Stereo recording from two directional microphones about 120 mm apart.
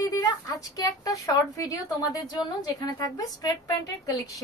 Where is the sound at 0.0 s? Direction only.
30° left (ahead or behind).